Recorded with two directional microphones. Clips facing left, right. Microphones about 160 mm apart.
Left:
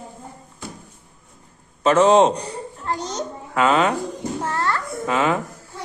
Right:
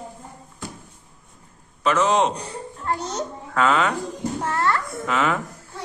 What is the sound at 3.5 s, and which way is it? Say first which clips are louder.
Speech: left 2 dB; 20° left (ahead or behind).